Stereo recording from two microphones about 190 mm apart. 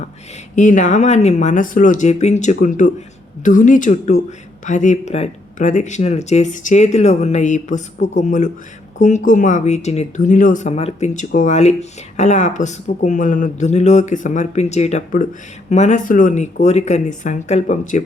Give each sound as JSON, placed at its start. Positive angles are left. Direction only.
{"t": 0.5, "sound": "speech", "side_deg": 40}